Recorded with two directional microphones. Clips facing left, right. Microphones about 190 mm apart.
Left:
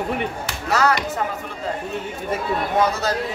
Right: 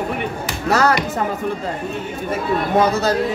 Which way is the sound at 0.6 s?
40° right (ahead or behind).